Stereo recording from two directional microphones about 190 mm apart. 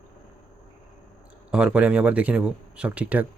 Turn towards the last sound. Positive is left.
turn(degrees=-10)  # may be behind; listen again after turning